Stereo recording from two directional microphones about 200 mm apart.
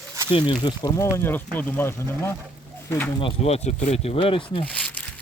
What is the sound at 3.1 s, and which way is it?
Speech, 30° left (ahead or behind).